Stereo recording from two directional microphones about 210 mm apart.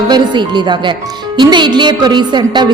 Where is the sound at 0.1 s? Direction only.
20° right (ahead or behind).